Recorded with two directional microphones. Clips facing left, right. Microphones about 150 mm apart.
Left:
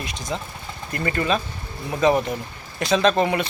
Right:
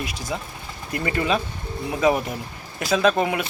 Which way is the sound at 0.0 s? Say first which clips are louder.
Even; 5° right (ahead or behind).